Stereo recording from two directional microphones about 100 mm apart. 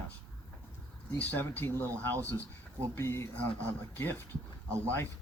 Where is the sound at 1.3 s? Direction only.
20° left (ahead or behind).